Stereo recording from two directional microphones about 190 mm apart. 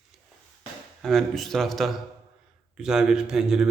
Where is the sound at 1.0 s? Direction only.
Centre (ahead or behind).